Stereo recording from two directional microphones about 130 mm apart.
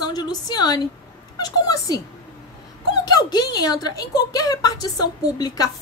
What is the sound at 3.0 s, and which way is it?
A woman's voice, 30° left (ahead or behind).